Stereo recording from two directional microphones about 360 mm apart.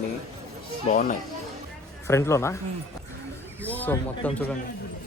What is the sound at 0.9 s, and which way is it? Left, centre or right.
Speech, left.